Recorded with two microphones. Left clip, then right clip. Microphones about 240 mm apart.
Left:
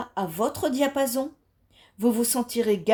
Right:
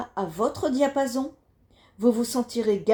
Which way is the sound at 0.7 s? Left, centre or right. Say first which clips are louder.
Right 1 dB; left.